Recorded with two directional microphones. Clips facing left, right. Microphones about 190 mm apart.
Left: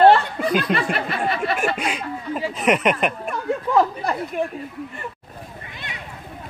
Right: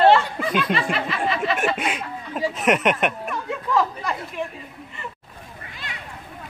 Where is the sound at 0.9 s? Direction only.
55° left (ahead or behind).